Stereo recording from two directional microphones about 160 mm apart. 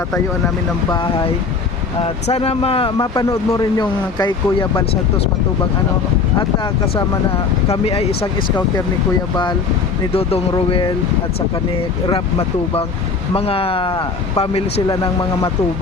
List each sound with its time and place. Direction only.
2.2 s speech: 40° left (ahead or behind)
3.2 s speech: 20° left (ahead or behind)
7.7 s speech: 40° left (ahead or behind)
10.5 s speech: 30° left (ahead or behind)
12.0 s speech: 35° left (ahead or behind)
14.8 s speech: 25° left (ahead or behind)